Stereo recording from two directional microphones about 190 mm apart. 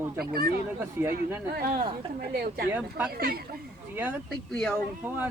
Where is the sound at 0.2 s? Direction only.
55° right (ahead or behind).